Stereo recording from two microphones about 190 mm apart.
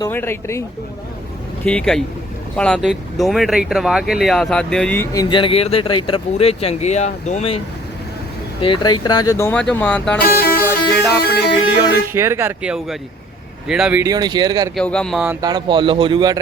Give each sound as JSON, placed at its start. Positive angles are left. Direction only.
{"t": 0.0, "sound": "speech", "side_deg": 10}
{"t": 1.6, "sound": "speech", "side_deg": 5}
{"t": 5.1, "sound": "speech", "side_deg": 20}
{"t": 8.6, "sound": "speech", "side_deg": 25}
{"t": 10.2, "sound": "music", "side_deg": 55}
{"t": 12.0, "sound": "speech", "side_deg": -15}
{"t": 14.0, "sound": "speech", "side_deg": -20}
{"t": 14.8, "sound": "speech", "side_deg": 5}
{"t": 15.3, "sound": "speech", "side_deg": -20}